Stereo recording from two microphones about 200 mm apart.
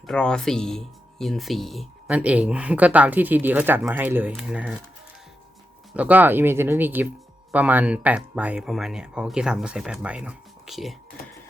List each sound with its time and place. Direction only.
0.1 s speech: 5° left (ahead or behind)
5.9 s speech: 5° right (ahead or behind)